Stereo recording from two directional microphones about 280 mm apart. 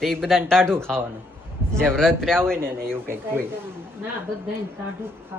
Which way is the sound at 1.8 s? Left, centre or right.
Centre.